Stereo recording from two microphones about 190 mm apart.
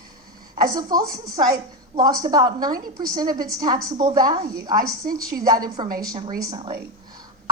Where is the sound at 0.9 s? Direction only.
20° right (ahead or behind).